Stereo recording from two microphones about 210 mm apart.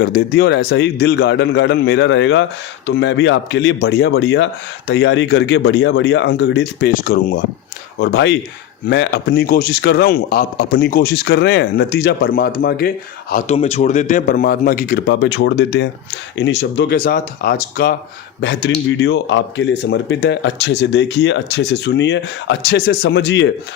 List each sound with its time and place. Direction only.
0.0 s a man's voice: 50° left (ahead or behind)
13.3 s a man's voice: 30° left (ahead or behind); by 17.0 s 55° left (ahead or behind)
17.0 s a man's voice: 40° left (ahead or behind); by 23.5 s 60° left (ahead or behind)